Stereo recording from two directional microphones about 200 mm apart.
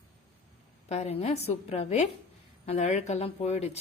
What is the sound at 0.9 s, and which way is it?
A woman's voice, 30° left (ahead or behind).